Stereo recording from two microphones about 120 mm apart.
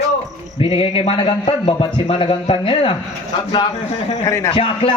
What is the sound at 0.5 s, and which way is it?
A man's voice, 50° left (ahead or behind).